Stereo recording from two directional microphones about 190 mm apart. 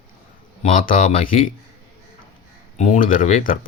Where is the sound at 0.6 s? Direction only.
40° left (ahead or behind).